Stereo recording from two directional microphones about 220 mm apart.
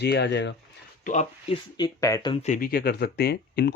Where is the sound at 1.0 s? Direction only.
35° left (ahead or behind).